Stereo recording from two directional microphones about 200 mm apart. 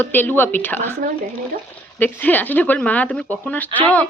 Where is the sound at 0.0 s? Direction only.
10° left (ahead or behind).